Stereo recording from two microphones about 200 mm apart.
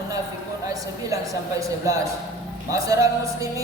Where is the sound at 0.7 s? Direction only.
15° right (ahead or behind).